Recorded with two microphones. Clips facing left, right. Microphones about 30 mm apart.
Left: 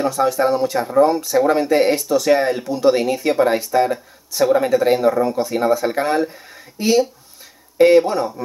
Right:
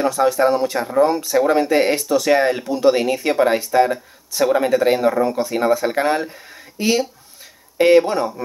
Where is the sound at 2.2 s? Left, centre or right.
Right.